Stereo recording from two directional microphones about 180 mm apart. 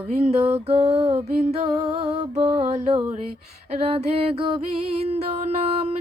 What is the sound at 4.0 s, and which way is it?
Female singing, 30° right (ahead or behind).